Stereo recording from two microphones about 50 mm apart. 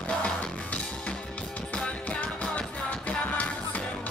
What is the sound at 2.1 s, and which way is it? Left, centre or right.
Music, left.